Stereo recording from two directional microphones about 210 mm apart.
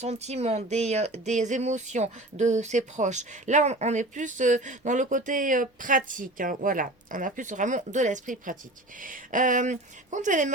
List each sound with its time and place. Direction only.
0.0 s speech: 30° right (ahead or behind)